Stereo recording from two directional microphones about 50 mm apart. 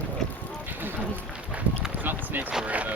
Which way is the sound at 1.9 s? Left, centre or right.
Right.